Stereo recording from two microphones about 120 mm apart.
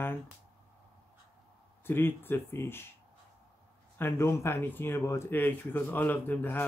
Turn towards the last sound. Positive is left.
turn(degrees=15)  # may be behind; listen again after turning